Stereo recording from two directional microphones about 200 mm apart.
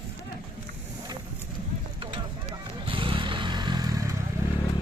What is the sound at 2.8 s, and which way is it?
Motorcycle, 25° right (ahead or behind).